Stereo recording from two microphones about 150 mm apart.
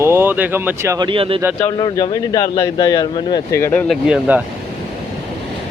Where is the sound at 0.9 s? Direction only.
35° right (ahead or behind).